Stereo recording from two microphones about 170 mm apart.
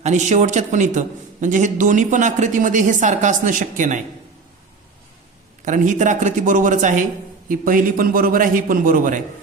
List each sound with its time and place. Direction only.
0.0 s a man's voice: 45° right (ahead or behind)
5.6 s a man's voice: 45° right (ahead or behind)